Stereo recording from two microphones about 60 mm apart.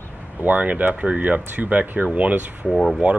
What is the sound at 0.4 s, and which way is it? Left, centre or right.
Speech, right.